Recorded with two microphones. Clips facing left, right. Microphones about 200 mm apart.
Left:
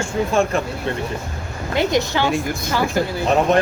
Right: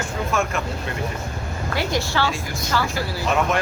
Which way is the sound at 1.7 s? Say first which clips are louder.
Left 6 dB; 20° left (ahead or behind).